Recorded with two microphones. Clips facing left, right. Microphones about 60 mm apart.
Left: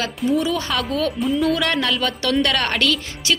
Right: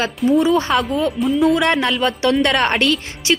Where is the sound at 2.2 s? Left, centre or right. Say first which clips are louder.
Right 4 dB; right.